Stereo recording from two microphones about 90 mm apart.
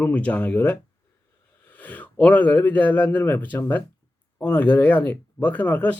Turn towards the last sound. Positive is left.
turn(degrees=20)  # may be behind; listen again after turning